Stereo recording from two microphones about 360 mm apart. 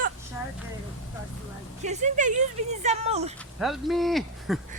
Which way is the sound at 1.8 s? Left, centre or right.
Centre.